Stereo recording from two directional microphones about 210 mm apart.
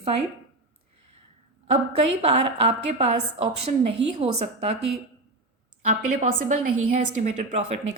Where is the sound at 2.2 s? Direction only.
30° right (ahead or behind).